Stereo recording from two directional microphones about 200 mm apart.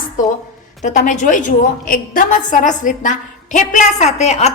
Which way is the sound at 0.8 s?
35° left (ahead or behind).